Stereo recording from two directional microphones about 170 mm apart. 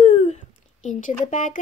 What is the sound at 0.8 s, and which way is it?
Speech, 45° left (ahead or behind).